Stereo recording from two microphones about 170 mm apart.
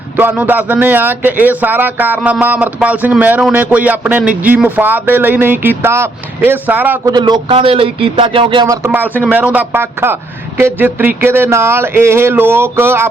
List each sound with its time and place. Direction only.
0.2 s speech: 10° right (ahead or behind)
7.0 s speech: 25° right (ahead or behind)
8.6 s speech: 15° right (ahead or behind)